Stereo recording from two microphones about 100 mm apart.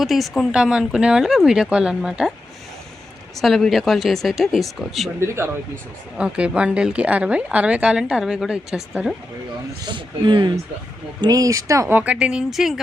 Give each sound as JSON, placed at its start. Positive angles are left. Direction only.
{"t": 0.0, "sound": "a woman's voice", "side_deg": 0}
{"t": 3.3, "sound": "speech", "side_deg": 0}
{"t": 5.2, "sound": "speech", "side_deg": -25}
{"t": 6.1, "sound": "a woman's voice", "side_deg": -10}
{"t": 9.8, "sound": "speech", "side_deg": -50}
{"t": 11.2, "sound": "speech", "side_deg": -35}
{"t": 11.9, "sound": "a woman's voice", "side_deg": -15}